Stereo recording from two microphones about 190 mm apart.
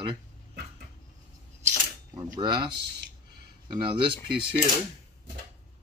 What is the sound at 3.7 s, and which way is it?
Speech, 25° right (ahead or behind).